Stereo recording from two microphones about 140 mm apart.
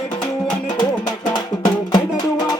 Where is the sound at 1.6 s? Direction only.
30° left (ahead or behind).